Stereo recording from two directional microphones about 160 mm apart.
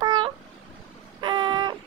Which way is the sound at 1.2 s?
30° right (ahead or behind).